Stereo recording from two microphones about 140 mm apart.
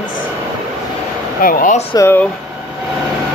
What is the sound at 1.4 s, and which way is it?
Speech, 85° left.